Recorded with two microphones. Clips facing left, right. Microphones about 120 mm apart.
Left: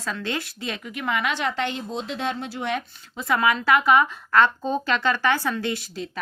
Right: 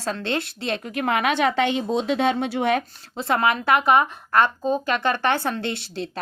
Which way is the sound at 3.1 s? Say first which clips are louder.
Right 1 dB; 30° right (ahead or behind).